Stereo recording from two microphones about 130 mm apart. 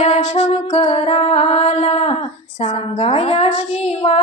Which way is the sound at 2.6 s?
65° left (ahead or behind).